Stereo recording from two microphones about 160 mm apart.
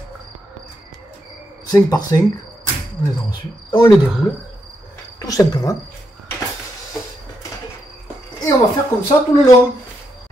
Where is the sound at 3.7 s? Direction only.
25° left (ahead or behind).